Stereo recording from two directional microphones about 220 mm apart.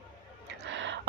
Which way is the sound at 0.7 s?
55° right (ahead or behind).